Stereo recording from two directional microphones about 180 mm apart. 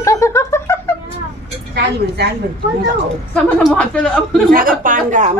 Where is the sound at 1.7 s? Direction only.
65° right (ahead or behind).